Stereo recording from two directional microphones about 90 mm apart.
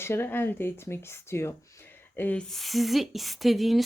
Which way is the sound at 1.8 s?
20° left (ahead or behind).